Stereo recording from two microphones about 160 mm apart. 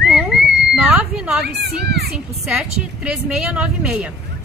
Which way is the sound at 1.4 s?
90° right.